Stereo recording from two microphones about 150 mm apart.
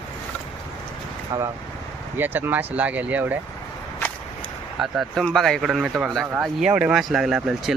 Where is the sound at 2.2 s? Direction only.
15° right (ahead or behind).